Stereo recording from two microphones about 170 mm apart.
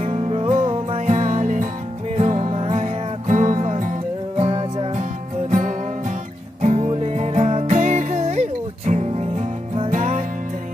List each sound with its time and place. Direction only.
0.0 s music: 35° right (ahead or behind)
1.0 s music: 45° right (ahead or behind)
5.5 s music: 45° right (ahead or behind)